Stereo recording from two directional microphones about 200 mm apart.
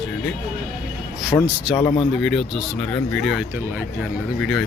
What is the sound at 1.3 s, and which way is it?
Speech, 15° left (ahead or behind).